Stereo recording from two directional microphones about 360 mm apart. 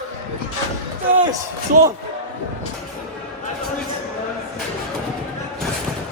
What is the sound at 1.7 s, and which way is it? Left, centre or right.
Speech, right.